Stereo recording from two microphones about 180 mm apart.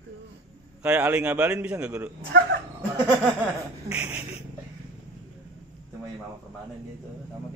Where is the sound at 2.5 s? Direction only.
60° right (ahead or behind).